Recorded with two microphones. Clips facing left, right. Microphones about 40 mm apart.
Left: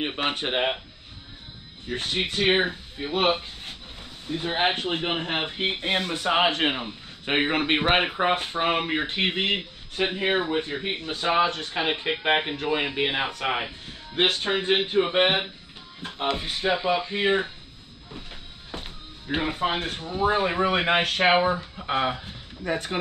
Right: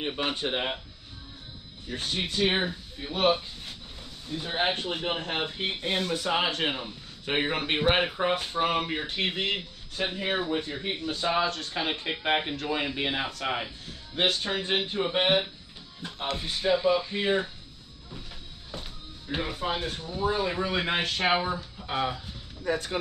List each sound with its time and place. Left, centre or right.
0.0 s speech: left
1.9 s speech: left
18.7 s speech: left